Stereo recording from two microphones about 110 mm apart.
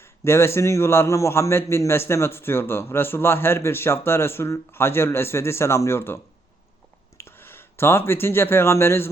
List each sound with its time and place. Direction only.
0.0 s a man's voice: 25° left (ahead or behind)
7.2 s speech: 20° left (ahead or behind)